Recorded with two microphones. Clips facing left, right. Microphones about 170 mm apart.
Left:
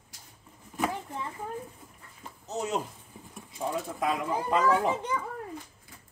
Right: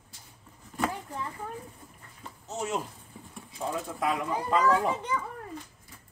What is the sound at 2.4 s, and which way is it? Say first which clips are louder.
Speech: left 1 dB; 20° left (ahead or behind).